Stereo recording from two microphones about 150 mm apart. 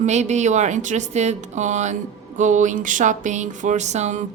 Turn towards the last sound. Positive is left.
turn(degrees=-50)  # may be behind; listen again after turning